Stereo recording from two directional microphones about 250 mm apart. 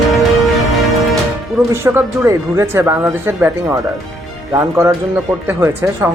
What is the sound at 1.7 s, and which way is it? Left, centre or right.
A man's voice, centre.